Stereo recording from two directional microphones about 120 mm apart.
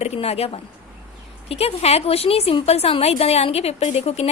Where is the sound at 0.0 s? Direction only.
60° left (ahead or behind).